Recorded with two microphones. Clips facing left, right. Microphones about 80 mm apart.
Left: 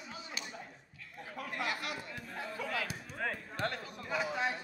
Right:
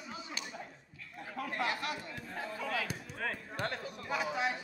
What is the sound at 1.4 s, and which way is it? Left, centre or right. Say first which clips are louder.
Chatter: right 2 dB; right.